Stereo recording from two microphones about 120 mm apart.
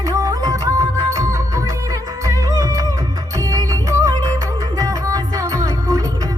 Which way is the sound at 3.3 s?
30° right (ahead or behind).